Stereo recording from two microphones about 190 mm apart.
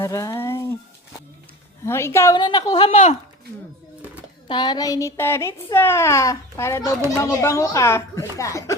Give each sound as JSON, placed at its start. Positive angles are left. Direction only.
{"t": 0.0, "sound": "a sound", "side_deg": 15}
{"t": 1.8, "sound": "a child's voice", "side_deg": 15}
{"t": 2.8, "sound": "speech", "side_deg": 35}
{"t": 4.4, "sound": "a child's voice", "side_deg": 25}